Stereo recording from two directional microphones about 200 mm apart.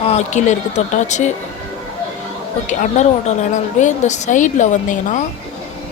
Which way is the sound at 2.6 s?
35° left (ahead or behind).